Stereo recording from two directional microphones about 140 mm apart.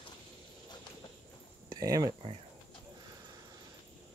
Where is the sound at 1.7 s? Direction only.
25° right (ahead or behind).